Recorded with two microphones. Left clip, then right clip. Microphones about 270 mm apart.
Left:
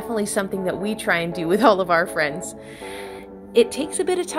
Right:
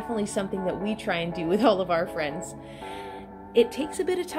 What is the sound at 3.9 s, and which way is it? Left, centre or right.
Speech, centre.